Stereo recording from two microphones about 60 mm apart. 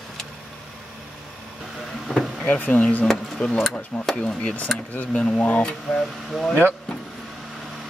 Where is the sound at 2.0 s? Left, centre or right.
Centre.